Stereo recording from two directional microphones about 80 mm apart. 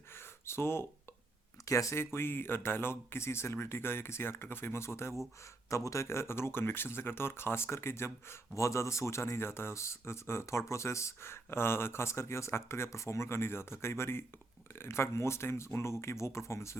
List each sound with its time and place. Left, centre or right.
0.4 s speech: left
1.6 s speech: left
2.1 s speech: left